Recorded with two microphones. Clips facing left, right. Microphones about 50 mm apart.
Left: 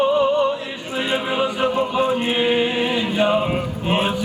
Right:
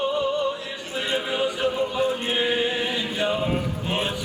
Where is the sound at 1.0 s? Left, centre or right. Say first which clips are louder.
Left 3 dB; left.